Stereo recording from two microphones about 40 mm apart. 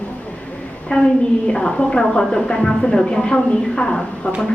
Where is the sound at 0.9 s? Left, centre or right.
Centre.